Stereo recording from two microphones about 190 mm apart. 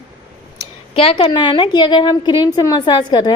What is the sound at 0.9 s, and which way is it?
A woman's voice, 30° left (ahead or behind).